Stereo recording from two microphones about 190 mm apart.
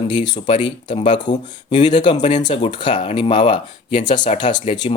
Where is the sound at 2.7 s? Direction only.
25° left (ahead or behind).